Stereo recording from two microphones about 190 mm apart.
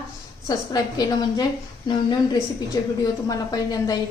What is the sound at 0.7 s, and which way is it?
Speech, 20° left (ahead or behind).